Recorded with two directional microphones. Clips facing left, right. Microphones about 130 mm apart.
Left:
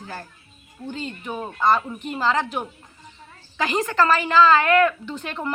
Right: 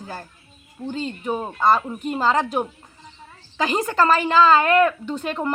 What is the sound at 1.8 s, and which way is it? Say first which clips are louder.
Speech: right 1 dB; 10° right (ahead or behind).